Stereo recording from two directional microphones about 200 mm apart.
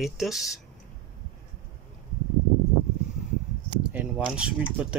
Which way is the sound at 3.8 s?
5° right (ahead or behind).